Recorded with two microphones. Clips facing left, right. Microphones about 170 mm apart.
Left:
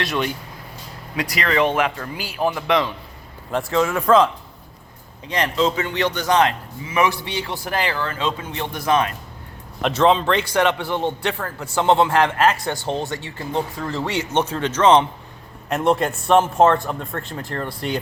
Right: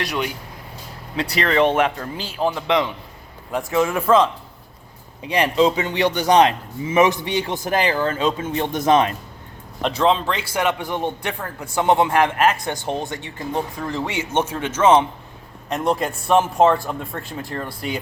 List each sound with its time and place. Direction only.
0.0 s a man's voice: 15° right (ahead or behind)
1.1 s speech: 30° right (ahead or behind)
2.0 s a man's voice: 20° right (ahead or behind)
4.0 s a man's voice: 5° right (ahead or behind)
5.2 s a man's voice: 15° right (ahead or behind)
9.8 s a man's voice: centre (ahead or behind)
15.7 s a man's voice: 5° left (ahead or behind)